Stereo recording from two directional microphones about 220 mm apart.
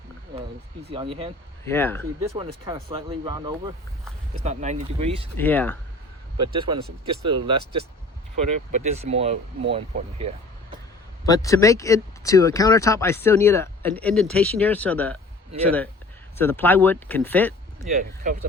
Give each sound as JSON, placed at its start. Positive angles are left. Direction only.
{"t": 0.8, "sound": "speech", "side_deg": -25}
{"t": 1.6, "sound": "speech", "side_deg": 10}
{"t": 2.3, "sound": "speech", "side_deg": -20}
{"t": 4.4, "sound": "speech", "side_deg": -30}
{"t": 5.4, "sound": "speech", "side_deg": 10}
{"t": 6.4, "sound": "speech", "side_deg": -20}
{"t": 11.3, "sound": "speech", "side_deg": 15}
{"t": 18.3, "sound": "speech", "side_deg": -35}